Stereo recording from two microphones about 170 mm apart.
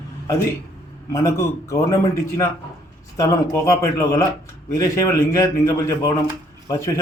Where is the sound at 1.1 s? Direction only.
20° left (ahead or behind).